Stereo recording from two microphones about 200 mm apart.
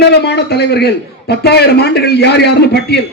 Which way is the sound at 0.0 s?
55° left (ahead or behind).